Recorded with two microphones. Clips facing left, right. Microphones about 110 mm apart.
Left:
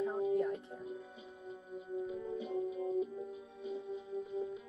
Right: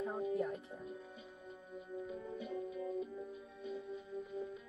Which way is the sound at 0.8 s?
20° left (ahead or behind).